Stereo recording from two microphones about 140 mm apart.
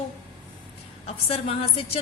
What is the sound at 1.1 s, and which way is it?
Speech, 45° left (ahead or behind).